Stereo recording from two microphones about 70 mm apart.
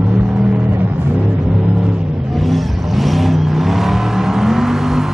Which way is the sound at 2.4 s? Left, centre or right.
Centre.